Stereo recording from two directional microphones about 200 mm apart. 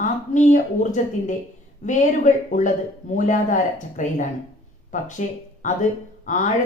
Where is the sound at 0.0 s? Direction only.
40° left (ahead or behind).